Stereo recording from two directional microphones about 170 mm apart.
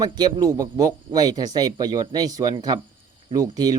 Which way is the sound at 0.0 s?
25° right (ahead or behind).